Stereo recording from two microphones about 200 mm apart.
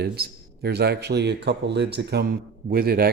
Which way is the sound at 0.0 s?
55° right (ahead or behind).